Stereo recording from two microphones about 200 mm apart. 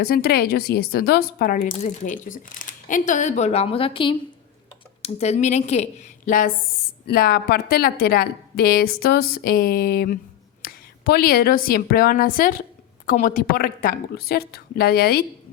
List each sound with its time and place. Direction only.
0.0 s a woman's voice: 50° left (ahead or behind)